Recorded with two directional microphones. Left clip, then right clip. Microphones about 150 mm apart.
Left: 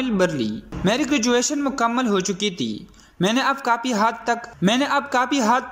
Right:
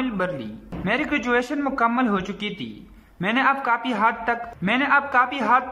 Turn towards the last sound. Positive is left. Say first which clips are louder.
# even
turn(degrees=25)  # may be behind; listen again after turning